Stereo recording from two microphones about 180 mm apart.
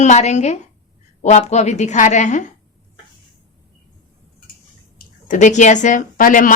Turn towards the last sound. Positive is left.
turn(degrees=50)  # may be behind; listen again after turning